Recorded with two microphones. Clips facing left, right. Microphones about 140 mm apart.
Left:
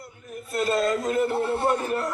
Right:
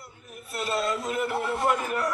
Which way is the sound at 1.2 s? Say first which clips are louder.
Left 3 dB; 30° left (ahead or behind).